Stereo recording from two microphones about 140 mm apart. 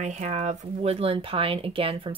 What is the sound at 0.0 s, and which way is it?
Speech, 55° right (ahead or behind).